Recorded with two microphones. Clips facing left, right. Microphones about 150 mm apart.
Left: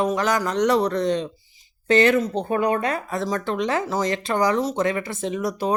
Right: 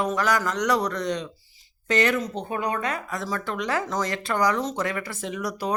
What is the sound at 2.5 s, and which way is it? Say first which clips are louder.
Speech: left 6 dB; 45° left (ahead or behind).